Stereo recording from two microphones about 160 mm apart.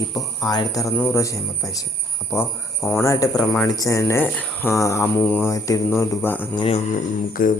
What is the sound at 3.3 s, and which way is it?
Speech, 10° left (ahead or behind).